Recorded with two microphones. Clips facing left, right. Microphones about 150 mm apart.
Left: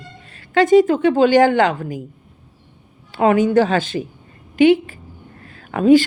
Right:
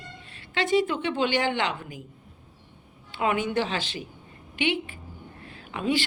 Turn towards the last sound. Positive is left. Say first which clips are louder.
# left 15 dB
turn(degrees=45)  # may be behind; listen again after turning